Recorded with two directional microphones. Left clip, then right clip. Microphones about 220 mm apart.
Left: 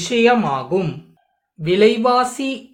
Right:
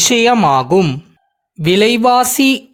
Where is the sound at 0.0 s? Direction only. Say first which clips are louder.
Right 5 dB; 50° right (ahead or behind).